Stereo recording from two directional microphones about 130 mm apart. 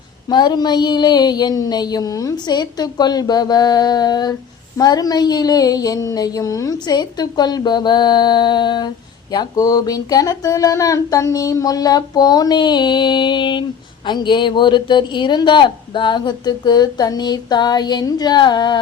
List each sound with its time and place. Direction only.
0.3 s speech: 35° left (ahead or behind)
4.8 s a sound: 30° left (ahead or behind)
6.8 s speech: 30° left (ahead or behind)